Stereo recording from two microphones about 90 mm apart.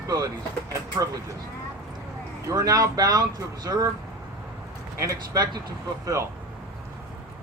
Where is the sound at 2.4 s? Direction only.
45° right (ahead or behind).